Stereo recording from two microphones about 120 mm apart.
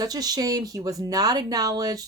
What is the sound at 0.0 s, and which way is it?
Speech, 30° right (ahead or behind).